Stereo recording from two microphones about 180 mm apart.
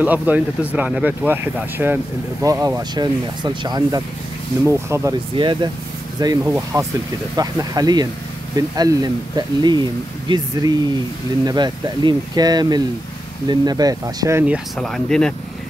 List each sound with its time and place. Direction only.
0.0 s speech: 10° right (ahead or behind)
5.4 s speech: 25° right (ahead or behind)
14.4 s speech: centre (ahead or behind)